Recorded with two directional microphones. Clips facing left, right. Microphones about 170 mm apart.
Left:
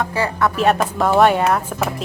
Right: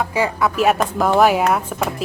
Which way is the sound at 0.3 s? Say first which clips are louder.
Left 1 dB; 5° right (ahead or behind).